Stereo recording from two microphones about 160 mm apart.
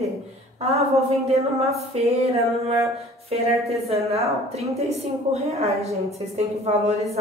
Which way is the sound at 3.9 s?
40° right (ahead or behind).